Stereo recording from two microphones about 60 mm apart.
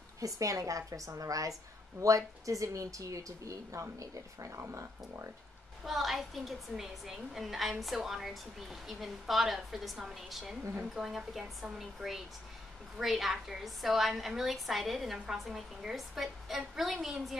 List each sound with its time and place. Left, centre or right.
0.2 s speech: right
4.5 s speech: right
5.9 s a woman's voice: centre